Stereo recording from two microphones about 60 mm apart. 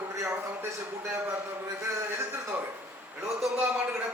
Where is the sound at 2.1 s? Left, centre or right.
Right.